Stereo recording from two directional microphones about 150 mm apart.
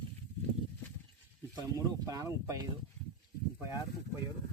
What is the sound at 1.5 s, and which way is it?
Speech, 25° right (ahead or behind).